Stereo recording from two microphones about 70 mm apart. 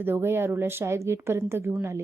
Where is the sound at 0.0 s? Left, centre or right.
Right.